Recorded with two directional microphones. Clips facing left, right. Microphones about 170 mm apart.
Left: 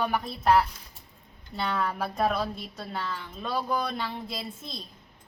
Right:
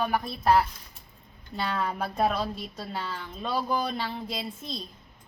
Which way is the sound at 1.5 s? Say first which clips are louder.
Even; centre (ahead or behind).